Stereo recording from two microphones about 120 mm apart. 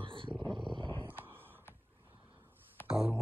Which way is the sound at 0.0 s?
45° right (ahead or behind).